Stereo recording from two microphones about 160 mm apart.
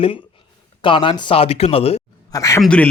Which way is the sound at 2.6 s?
5° left (ahead or behind).